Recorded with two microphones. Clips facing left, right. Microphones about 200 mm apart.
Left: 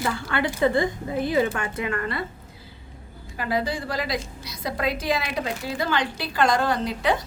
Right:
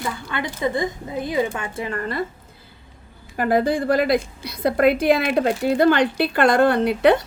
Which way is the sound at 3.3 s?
50° right (ahead or behind).